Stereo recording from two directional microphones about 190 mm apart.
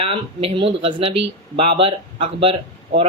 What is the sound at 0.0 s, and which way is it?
Speech, 30° right (ahead or behind).